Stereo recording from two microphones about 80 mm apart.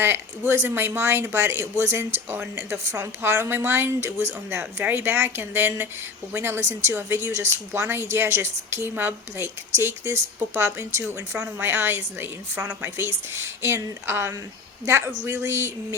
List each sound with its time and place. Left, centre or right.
0.0 s a woman's voice: right